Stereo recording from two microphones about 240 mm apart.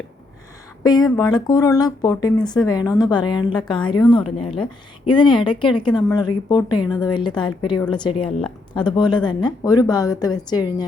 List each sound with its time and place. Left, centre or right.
0.9 s a woman's voice: centre